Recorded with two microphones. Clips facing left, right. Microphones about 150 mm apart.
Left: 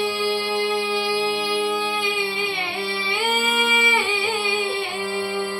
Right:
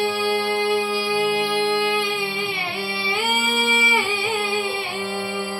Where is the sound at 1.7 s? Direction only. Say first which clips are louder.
Right 3 dB; centre (ahead or behind).